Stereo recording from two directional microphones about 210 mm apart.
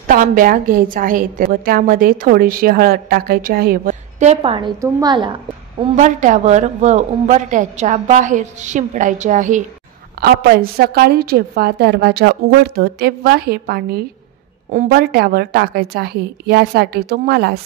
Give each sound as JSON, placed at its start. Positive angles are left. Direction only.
{"t": 0.0, "sound": "a woman's voice", "side_deg": -40}
{"t": 5.9, "sound": "a woman's voice", "side_deg": -35}
{"t": 10.2, "sound": "a woman's voice", "side_deg": -45}